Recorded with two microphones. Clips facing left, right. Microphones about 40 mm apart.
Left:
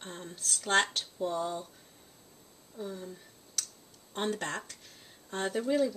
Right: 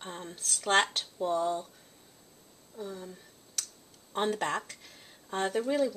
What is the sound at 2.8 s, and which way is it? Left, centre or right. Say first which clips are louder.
Speech: even; centre.